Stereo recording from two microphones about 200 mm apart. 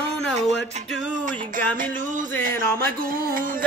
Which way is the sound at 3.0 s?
45° right (ahead or behind).